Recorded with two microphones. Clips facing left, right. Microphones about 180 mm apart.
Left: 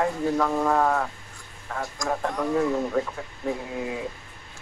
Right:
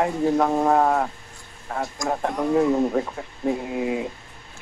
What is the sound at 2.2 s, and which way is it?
Speech, 20° right (ahead or behind).